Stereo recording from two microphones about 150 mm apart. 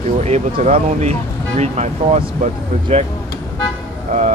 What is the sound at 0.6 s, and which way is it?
Speech, 50° right (ahead or behind).